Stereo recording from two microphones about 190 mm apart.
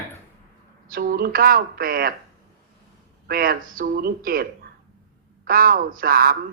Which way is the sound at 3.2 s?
50° right (ahead or behind).